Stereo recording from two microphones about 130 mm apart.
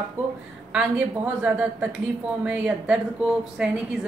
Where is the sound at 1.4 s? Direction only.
10° right (ahead or behind).